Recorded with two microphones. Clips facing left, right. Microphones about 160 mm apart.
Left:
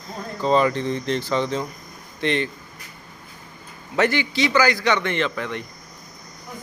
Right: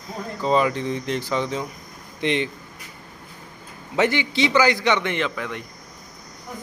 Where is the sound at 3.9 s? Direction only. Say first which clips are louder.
Even; 20° right (ahead or behind).